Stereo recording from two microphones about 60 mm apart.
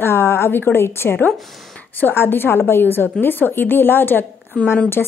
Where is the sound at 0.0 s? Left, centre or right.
Left.